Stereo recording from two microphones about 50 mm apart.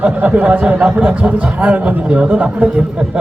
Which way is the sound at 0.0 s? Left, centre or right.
Right.